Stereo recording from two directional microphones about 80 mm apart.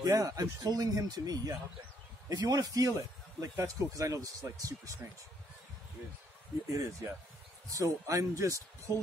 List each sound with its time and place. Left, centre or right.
0.0 s speech: right
6.7 s speech: right